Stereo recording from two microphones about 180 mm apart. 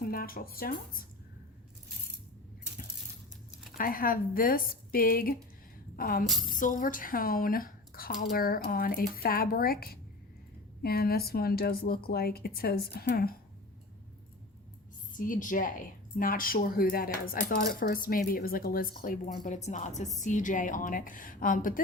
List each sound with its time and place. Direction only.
0.0 s speech: 55° left (ahead or behind)
3.8 s speech: 55° left (ahead or behind)
6.2 s a woman's voice: centre (ahead or behind)
6.5 s speech: 45° left (ahead or behind)
15.1 s a woman's voice: 50° left (ahead or behind)